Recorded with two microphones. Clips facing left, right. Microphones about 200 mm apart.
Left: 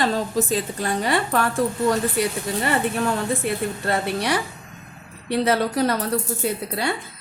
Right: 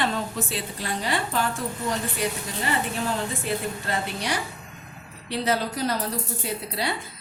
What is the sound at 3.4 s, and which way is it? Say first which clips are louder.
A woman's voice: left 4 dB; 60° left (ahead or behind).